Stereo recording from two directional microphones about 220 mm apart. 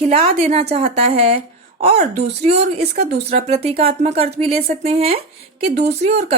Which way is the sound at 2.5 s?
30° right (ahead or behind).